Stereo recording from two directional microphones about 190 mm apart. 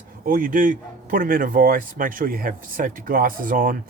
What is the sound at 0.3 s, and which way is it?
Speech, 45° right (ahead or behind).